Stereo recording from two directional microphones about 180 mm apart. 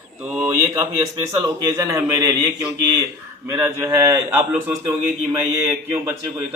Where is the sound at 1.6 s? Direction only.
20° right (ahead or behind).